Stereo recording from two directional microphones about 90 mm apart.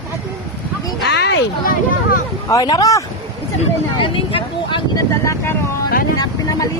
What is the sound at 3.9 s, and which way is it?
Speech, 80° left.